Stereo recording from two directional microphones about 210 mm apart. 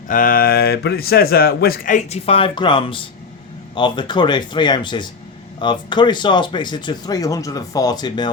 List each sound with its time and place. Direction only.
0.1 s a man's voice: 40° left (ahead or behind); by 8.3 s 20° left (ahead or behind)